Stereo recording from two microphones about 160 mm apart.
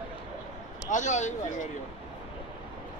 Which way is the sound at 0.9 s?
50° left (ahead or behind).